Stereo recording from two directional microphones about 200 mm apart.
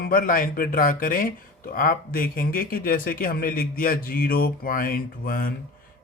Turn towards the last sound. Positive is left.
turn(degrees=45)  # may be behind; listen again after turning